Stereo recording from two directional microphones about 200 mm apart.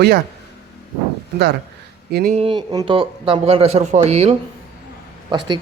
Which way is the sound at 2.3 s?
25° right (ahead or behind).